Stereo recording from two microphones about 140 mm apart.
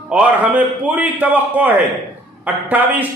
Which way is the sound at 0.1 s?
10° right (ahead or behind).